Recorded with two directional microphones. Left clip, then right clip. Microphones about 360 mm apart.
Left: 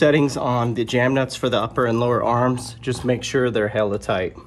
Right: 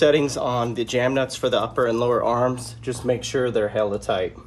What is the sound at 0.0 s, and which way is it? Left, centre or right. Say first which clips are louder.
Speech: left 1 dB; left.